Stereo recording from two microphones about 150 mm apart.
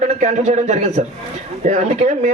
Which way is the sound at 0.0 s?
55° right (ahead or behind).